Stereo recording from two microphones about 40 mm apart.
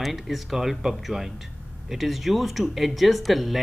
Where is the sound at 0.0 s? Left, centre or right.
Centre.